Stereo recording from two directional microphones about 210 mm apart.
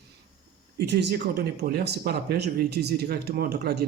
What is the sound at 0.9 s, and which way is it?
Speech, 50° right (ahead or behind).